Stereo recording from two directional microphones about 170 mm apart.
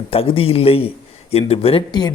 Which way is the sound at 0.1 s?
35° left (ahead or behind).